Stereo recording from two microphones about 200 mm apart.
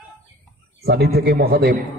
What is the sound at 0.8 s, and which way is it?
Speech, 55° right (ahead or behind).